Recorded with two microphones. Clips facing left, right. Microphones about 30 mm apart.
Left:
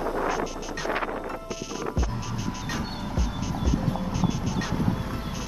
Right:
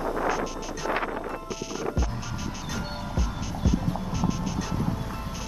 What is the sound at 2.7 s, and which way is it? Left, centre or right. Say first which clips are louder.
Music: left 1 dB; centre.